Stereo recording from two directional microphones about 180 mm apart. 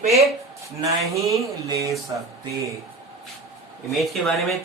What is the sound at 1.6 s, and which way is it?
Speech, 20° right (ahead or behind).